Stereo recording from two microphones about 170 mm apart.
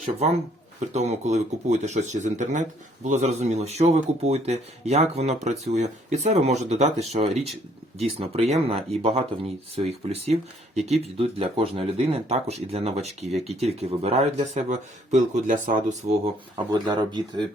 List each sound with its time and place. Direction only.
0.8 s speech: 40° right (ahead or behind)
16.7 s speech: 25° right (ahead or behind)